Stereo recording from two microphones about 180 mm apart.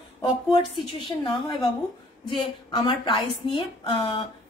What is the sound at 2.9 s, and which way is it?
A woman's voice, 30° left (ahead or behind).